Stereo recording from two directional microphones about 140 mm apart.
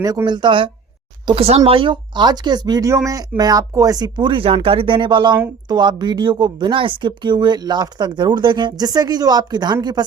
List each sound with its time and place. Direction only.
0.0 s speech: 25° right (ahead or behind)